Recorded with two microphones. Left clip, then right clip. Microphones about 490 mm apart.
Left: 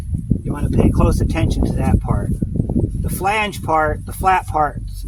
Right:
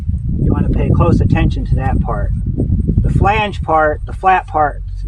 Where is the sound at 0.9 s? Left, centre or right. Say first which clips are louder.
Right 4 dB; left.